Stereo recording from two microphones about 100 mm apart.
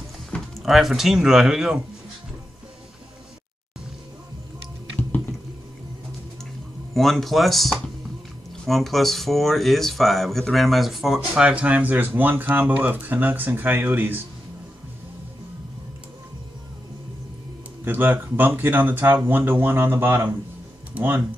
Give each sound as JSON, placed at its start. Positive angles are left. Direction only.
{"t": 0.3, "sound": "speech", "side_deg": 0}
{"t": 6.9, "sound": "speech", "side_deg": 0}
{"t": 17.8, "sound": "speech", "side_deg": -20}